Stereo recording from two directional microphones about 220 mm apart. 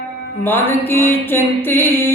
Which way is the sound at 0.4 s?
10° left (ahead or behind).